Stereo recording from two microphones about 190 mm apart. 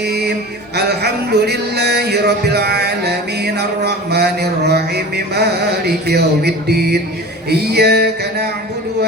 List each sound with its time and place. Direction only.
0.0 s mantra: 60° right (ahead or behind)
0.8 s music: 60° right (ahead or behind)